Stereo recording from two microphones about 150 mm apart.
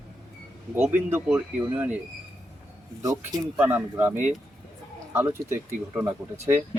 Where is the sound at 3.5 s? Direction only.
10° right (ahead or behind).